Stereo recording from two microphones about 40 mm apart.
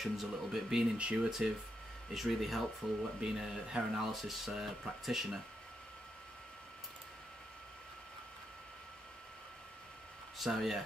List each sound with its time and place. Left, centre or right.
0.0 s speech: centre
0.9 s speech: right
2.1 s speech: centre
3.2 s speech: centre
4.0 s speech: centre
10.3 s speech: centre